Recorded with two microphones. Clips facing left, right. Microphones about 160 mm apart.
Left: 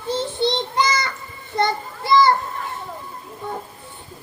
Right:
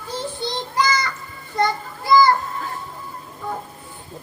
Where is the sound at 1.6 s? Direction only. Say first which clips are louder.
Even; 25° left (ahead or behind).